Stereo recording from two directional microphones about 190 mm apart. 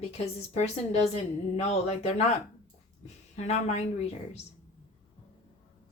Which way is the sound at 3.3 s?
35° left (ahead or behind).